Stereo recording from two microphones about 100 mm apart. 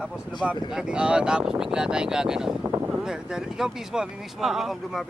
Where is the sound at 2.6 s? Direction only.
25° right (ahead or behind).